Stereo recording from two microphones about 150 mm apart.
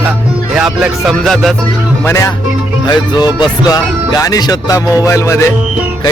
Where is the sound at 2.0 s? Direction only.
20° left (ahead or behind).